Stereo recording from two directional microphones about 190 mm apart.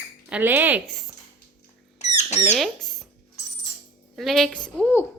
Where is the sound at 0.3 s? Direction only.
10° right (ahead or behind).